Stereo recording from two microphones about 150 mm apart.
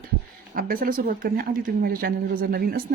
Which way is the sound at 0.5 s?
70° right (ahead or behind).